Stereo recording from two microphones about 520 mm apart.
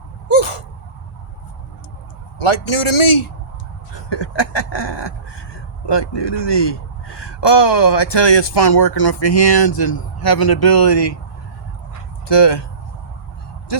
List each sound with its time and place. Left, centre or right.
0.3 s gasp: left
2.4 s a man's voice: left
4.1 s speech: left
12.3 s speech: left